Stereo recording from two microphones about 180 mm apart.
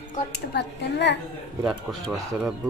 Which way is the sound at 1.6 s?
5° right (ahead or behind).